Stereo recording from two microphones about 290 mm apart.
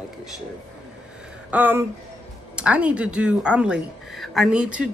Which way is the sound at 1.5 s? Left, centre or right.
Centre.